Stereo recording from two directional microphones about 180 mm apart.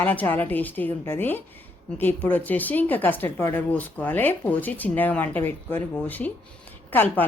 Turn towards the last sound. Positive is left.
turn(degrees=10)  # may be behind; listen again after turning